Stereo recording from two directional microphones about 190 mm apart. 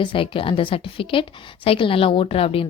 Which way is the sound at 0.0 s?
25° left (ahead or behind).